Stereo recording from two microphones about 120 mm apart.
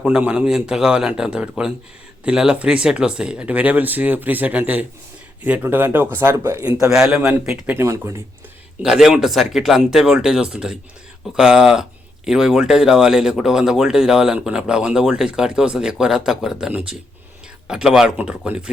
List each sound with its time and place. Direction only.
0.0 s speech: 10° right (ahead or behind)
7.8 s speech: 25° right (ahead or behind)
8.8 s speech: 5° right (ahead or behind)